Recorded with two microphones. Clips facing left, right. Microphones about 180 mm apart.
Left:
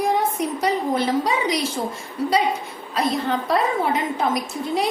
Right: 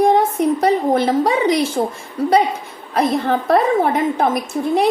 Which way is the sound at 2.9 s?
55° right (ahead or behind).